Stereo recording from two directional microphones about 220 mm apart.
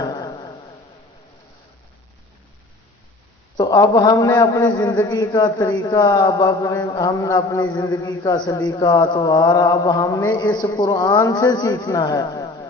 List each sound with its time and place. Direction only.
0.0 s dog: 15° left (ahead or behind)
3.6 s a man's voice: 15° left (ahead or behind)